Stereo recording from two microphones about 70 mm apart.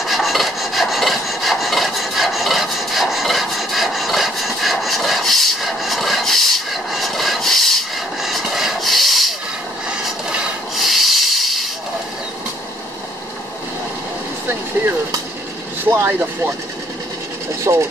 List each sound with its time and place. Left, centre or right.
0.0 s filing: centre
10.8 s rub: centre
15.8 s vehicle: right
17.7 s speech: right